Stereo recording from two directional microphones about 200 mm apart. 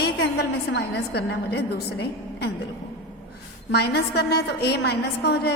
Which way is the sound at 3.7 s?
55° left (ahead or behind).